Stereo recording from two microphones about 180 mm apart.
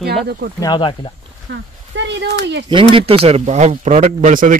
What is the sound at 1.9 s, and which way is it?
Speech, 80° right.